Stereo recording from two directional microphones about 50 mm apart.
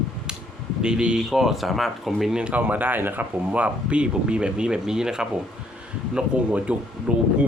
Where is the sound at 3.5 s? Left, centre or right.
Right.